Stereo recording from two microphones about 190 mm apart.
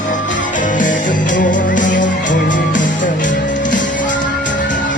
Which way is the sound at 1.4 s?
45° left (ahead or behind).